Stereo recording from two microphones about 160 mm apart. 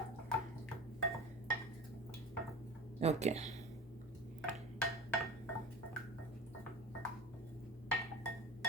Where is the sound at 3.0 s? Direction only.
45° right (ahead or behind).